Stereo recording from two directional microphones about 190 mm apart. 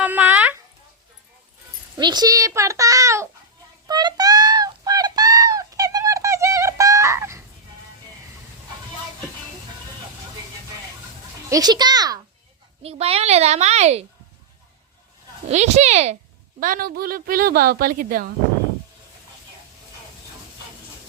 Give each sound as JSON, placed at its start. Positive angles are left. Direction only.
{"t": 0.0, "sound": "a sound", "side_deg": -10}
{"t": 2.0, "sound": "a child's voice", "side_deg": -20}
{"t": 3.8, "sound": "a sound", "side_deg": -20}
{"t": 11.4, "sound": "a child's voice", "side_deg": -20}
{"t": 12.8, "sound": "a child's voice", "side_deg": -30}
{"t": 15.4, "sound": "a child's voice", "side_deg": -35}